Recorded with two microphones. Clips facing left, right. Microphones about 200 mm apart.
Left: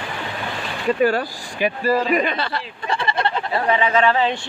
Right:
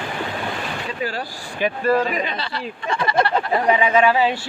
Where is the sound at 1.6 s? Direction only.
10° left (ahead or behind).